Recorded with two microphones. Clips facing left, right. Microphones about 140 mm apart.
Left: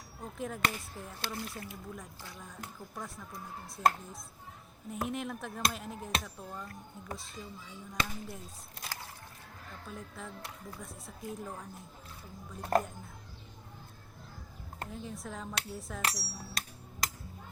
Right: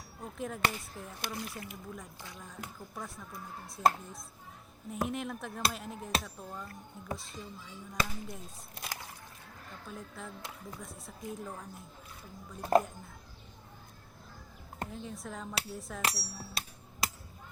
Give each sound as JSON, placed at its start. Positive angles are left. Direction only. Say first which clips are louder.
{"t": 0.2, "sound": "speech", "louder": "right 1 dB", "side_deg": 0}
{"t": 1.2, "sound": "speech", "louder": "even", "side_deg": -15}
{"t": 2.9, "sound": "speech", "louder": "left 1 dB", "side_deg": 0}
{"t": 8.8, "sound": "a sound", "louder": "right 1 dB", "side_deg": -15}
{"t": 9.8, "sound": "speech", "louder": "even", "side_deg": 0}
{"t": 14.8, "sound": "speech", "louder": "even", "side_deg": 0}
{"t": 16.1, "sound": "a sound", "louder": "even", "side_deg": -5}